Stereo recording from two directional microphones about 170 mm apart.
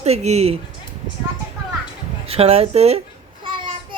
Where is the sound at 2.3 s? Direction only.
35° right (ahead or behind).